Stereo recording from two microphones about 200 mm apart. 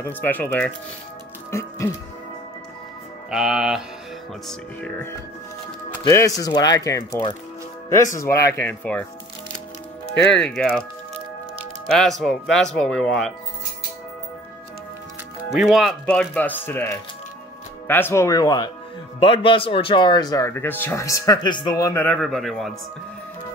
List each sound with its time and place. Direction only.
0.0 s speech: 10° left (ahead or behind)
1.5 s music: 15° left (ahead or behind)
3.3 s speech: 5° right (ahead or behind)
6.0 s speech: 15° left (ahead or behind)
10.2 s speech: 5° left (ahead or behind)
12.0 s speech: centre (ahead or behind)
15.5 s speech: centre (ahead or behind)